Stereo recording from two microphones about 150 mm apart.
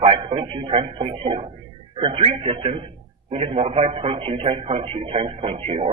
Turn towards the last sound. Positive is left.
turn(degrees=-40)  # may be behind; listen again after turning